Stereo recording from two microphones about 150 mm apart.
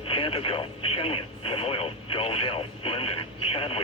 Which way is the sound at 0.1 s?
35° left (ahead or behind).